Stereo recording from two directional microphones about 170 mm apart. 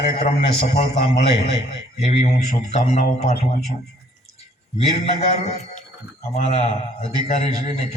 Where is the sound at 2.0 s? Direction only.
40° left (ahead or behind).